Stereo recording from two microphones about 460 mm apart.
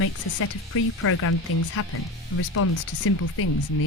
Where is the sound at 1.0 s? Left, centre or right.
Left.